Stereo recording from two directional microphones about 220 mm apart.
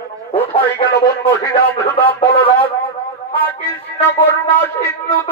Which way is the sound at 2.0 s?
25° left (ahead or behind).